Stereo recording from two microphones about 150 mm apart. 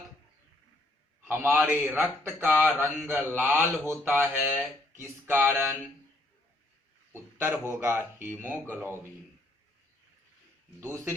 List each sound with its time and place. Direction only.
1.3 s speech: 15° right (ahead or behind)
7.1 s speech: 15° right (ahead or behind)
10.8 s speech: 15° right (ahead or behind)